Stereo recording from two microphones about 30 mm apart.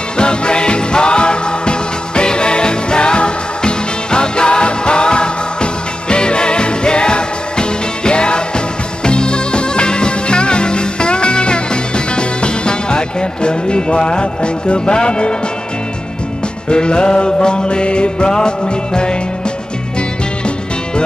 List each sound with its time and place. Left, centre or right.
0.2 s music: left
16.6 s music: left